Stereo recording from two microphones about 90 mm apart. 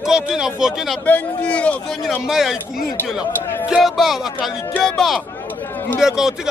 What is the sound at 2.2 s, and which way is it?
Speech, 5° right (ahead or behind).